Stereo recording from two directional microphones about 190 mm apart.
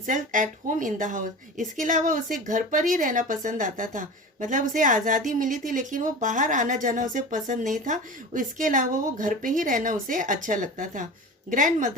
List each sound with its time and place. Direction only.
0.0 s speech: 45° right (ahead or behind)